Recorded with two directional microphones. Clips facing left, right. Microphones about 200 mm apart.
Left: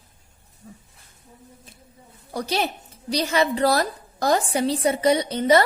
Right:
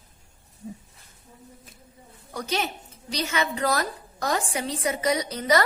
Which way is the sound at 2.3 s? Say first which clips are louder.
Left 4 dB; 35° left (ahead or behind).